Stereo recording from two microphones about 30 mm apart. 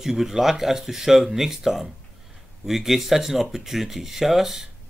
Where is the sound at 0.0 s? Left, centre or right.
Centre.